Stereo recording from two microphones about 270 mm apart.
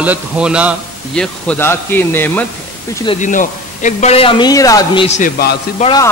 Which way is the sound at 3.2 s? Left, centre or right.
Left.